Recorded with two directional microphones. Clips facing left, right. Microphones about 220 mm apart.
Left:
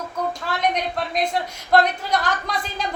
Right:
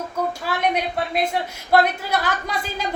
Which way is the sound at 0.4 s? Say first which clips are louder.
Even; 5° right (ahead or behind).